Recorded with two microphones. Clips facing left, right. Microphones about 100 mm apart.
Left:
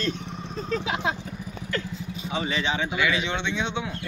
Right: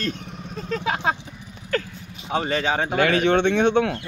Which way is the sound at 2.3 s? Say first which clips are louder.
Right 5 dB; 50° right (ahead or behind).